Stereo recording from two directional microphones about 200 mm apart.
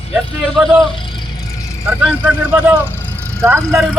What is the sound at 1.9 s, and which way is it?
Speech, 5° right (ahead or behind).